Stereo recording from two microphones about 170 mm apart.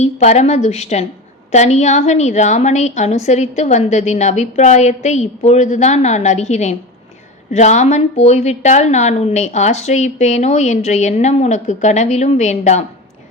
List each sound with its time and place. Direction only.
0.0 s a woman's voice: 40° left (ahead or behind)